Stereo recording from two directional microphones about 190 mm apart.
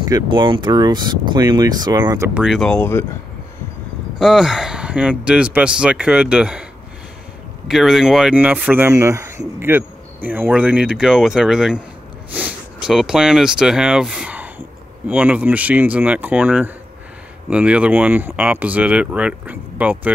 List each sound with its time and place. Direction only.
0.1 s speech: 25° right (ahead or behind); by 3.1 s 10° left (ahead or behind)
4.2 s speech: 5° right (ahead or behind)
7.6 s speech: centre (ahead or behind)